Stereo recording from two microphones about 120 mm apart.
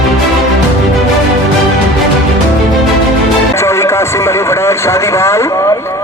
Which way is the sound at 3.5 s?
25° left (ahead or behind).